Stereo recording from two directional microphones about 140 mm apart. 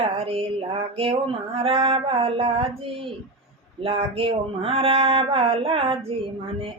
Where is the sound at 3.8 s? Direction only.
40° right (ahead or behind).